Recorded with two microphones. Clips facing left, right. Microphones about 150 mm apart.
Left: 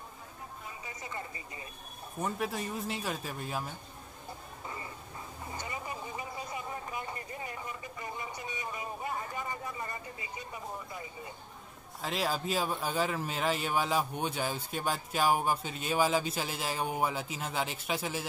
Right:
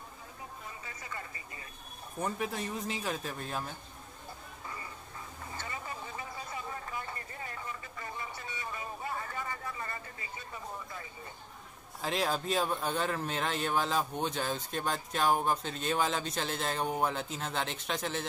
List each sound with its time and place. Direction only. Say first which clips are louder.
0.8 s a sound: left 5 dB; 20° left (ahead or behind)
2.2 s speech: left 1 dB; centre (ahead or behind)
5.5 s vehicle: left 2 dB; 15° left (ahead or behind)
12.0 s speech: right 1 dB; centre (ahead or behind)